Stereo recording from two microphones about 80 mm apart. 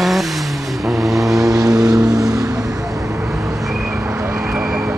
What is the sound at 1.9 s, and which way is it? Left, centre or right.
Music, centre.